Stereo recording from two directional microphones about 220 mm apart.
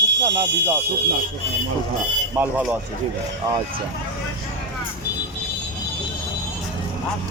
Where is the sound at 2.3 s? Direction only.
10° right (ahead or behind).